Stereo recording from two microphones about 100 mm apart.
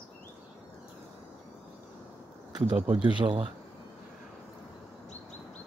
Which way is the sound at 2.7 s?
60° right (ahead or behind).